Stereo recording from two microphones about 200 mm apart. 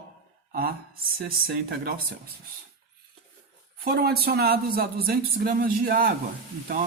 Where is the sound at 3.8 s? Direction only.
50° right (ahead or behind).